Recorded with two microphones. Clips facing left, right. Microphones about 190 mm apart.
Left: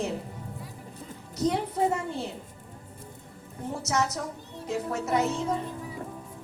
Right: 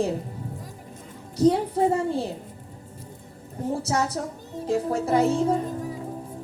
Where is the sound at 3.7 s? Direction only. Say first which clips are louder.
Right 3 dB; 30° right (ahead or behind).